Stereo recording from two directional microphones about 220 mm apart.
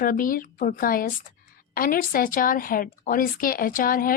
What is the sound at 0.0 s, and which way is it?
Speech, 40° left (ahead or behind).